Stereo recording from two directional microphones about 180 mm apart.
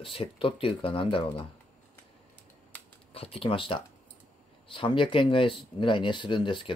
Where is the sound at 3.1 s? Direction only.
35° left (ahead or behind).